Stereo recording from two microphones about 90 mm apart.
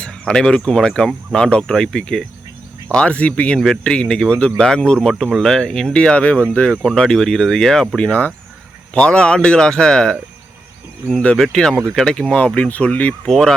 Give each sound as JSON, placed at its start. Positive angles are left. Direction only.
{"t": 0.0, "sound": "speech", "side_deg": 10}
{"t": 11.3, "sound": "speech", "side_deg": 5}
{"t": 13.2, "sound": "speech", "side_deg": 5}